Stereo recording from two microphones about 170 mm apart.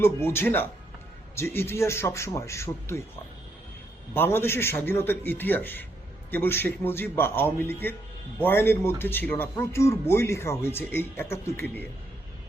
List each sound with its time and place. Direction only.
0.0 s speech: 15° left (ahead or behind)
4.1 s speech: 15° left (ahead or behind)